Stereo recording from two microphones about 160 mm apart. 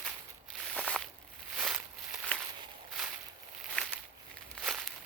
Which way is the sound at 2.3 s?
5° left (ahead or behind).